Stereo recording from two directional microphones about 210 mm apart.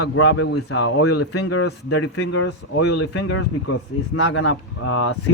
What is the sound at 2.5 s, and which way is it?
Speech, 55° left (ahead or behind).